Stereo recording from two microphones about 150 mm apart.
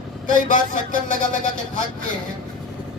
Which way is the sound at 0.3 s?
60° left (ahead or behind).